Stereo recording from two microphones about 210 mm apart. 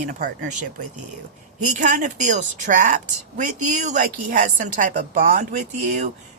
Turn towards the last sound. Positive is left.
turn(degrees=-35)  # may be behind; listen again after turning